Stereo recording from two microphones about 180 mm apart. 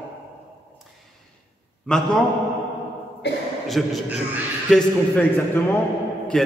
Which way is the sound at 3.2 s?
70° left (ahead or behind).